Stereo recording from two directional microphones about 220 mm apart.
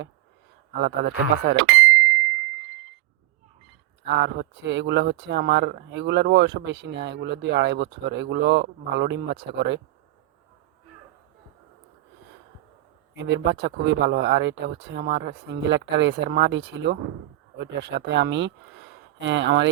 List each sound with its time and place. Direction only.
0.8 s speech: 50° right (ahead or behind)
4.0 s speech: 50° right (ahead or behind)
13.1 s speech: 55° right (ahead or behind)